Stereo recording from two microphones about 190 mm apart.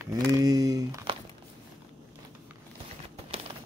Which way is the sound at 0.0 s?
20° right (ahead or behind).